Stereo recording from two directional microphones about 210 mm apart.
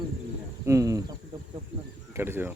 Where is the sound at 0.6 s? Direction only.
15° right (ahead or behind).